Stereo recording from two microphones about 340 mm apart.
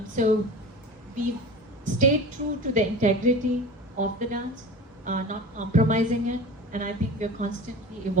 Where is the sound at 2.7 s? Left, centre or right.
Right.